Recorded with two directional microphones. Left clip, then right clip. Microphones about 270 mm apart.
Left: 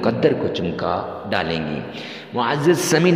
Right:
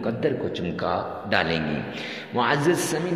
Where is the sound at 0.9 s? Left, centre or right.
Centre.